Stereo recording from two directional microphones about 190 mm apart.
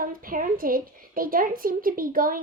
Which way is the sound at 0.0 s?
50° right (ahead or behind).